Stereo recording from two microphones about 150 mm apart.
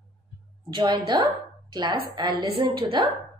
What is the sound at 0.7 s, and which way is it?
A woman's voice, 30° right (ahead or behind).